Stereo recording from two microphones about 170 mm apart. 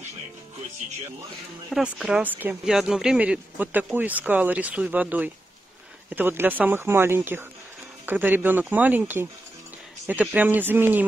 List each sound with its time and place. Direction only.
1.7 s speech: 5° right (ahead or behind)
10.3 s speech: 10° right (ahead or behind)